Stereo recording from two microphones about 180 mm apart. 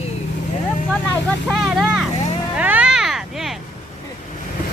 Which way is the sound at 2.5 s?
5° right (ahead or behind).